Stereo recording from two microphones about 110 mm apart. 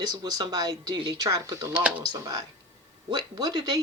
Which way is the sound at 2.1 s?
35° right (ahead or behind).